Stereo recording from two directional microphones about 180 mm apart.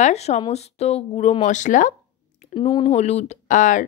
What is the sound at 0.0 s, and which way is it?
A woman's voice, 40° left (ahead or behind).